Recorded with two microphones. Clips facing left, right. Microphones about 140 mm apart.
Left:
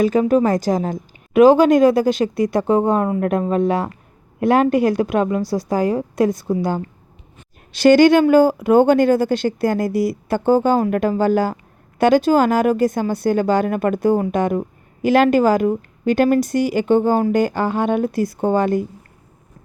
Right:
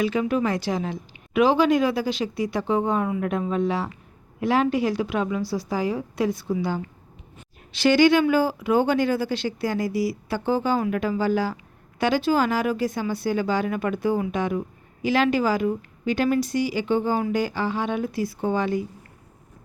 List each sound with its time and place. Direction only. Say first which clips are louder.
0.0 s speech: left 8 dB; 45° left (ahead or behind)